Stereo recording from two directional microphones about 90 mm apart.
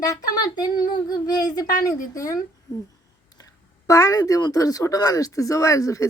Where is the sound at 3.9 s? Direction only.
35° left (ahead or behind).